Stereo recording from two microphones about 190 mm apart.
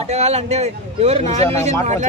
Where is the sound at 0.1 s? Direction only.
35° right (ahead or behind).